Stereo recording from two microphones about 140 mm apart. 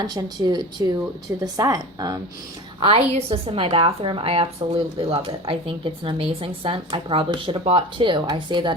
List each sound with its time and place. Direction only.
0.0 s speech: 30° right (ahead or behind)
2.8 s a woman's voice: 45° right (ahead or behind)